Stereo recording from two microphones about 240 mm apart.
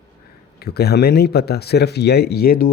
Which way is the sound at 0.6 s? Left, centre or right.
Left.